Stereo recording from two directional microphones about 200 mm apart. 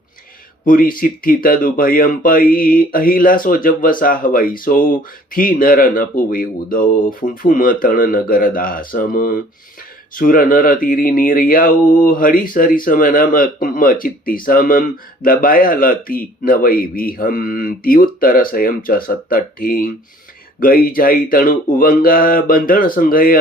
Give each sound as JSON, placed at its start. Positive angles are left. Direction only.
{"t": 0.6, "sound": "speech", "side_deg": 45}